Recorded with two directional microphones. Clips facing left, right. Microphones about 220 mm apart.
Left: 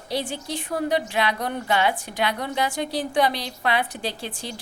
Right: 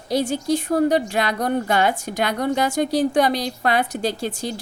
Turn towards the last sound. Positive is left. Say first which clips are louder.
# right 7 dB
turn(degrees=-40)  # may be behind; listen again after turning